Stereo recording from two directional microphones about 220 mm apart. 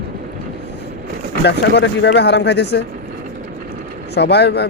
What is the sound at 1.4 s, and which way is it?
Speech, 50° left (ahead or behind).